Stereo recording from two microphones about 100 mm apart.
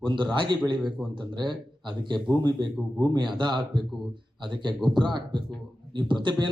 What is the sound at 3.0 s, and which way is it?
Speech, 45° right (ahead or behind).